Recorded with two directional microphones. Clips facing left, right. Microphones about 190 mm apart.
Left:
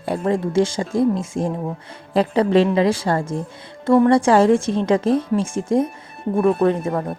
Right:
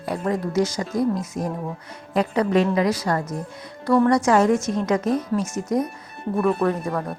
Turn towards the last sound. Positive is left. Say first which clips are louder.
# left 4 dB
turn(degrees=25)  # may be behind; listen again after turning